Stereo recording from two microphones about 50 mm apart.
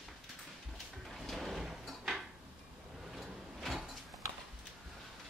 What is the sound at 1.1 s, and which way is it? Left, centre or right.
Drawer open or close, centre.